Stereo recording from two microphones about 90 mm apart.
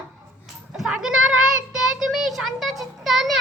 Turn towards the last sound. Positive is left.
turn(degrees=0)  # may be behind; listen again after turning